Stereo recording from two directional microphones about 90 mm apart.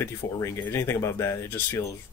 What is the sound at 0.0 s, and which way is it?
Speech, 30° left (ahead or behind).